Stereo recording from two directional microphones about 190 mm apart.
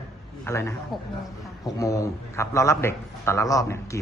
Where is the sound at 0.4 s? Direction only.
15° left (ahead or behind).